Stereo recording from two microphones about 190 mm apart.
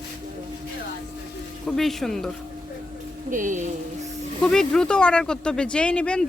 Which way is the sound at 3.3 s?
40° right (ahead or behind).